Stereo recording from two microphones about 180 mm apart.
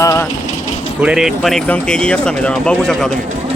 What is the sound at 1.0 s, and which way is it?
Speech, 5° right (ahead or behind).